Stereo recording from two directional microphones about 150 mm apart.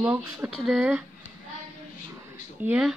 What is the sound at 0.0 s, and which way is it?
Speech, 15° right (ahead or behind).